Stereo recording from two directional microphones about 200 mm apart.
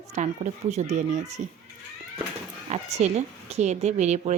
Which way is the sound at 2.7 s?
35° right (ahead or behind).